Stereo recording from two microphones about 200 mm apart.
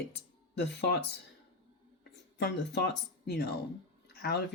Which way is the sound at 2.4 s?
55° left (ahead or behind).